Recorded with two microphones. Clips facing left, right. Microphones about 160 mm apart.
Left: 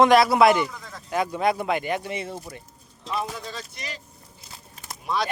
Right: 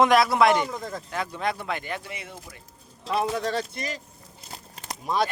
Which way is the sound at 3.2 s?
70° right (ahead or behind).